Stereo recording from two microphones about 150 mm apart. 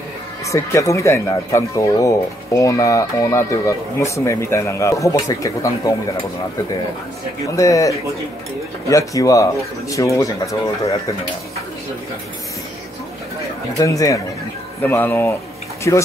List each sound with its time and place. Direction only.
0.5 s speech: 20° left (ahead or behind)
7.5 s speech: 20° left (ahead or behind)
13.7 s speech: 20° left (ahead or behind)